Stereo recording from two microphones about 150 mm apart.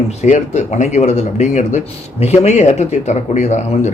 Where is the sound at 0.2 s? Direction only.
55° left (ahead or behind).